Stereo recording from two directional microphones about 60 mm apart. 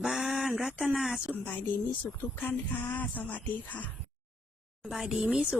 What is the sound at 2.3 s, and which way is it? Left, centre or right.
Speech, left.